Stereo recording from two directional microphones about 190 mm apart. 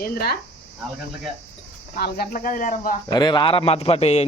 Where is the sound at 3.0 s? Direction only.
20° left (ahead or behind).